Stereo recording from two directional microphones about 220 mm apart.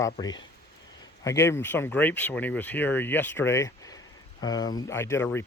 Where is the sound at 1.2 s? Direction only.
10° left (ahead or behind).